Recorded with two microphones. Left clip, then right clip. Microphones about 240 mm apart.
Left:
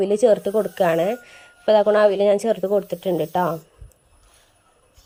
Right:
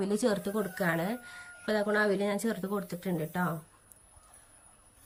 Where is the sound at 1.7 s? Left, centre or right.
Left.